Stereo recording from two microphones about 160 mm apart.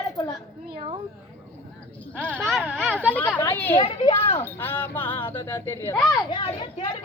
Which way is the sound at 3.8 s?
35° left (ahead or behind).